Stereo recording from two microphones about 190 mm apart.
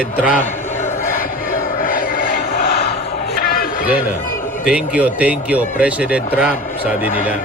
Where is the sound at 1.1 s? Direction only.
45° left (ahead or behind).